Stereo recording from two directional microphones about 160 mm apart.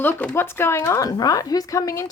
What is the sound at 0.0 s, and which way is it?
Speech, 10° left (ahead or behind).